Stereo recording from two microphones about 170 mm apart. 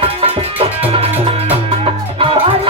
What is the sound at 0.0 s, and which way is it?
Music, 35° right (ahead or behind).